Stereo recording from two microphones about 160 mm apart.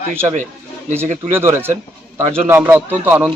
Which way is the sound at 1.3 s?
15° right (ahead or behind).